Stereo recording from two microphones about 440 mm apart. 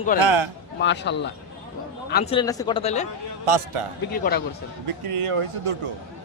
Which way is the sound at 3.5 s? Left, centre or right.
Right.